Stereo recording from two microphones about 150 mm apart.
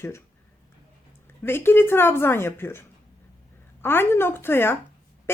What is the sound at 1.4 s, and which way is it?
Speech, 15° left (ahead or behind).